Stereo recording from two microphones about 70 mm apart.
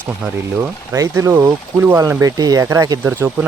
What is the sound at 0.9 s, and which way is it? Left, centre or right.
Speech, right.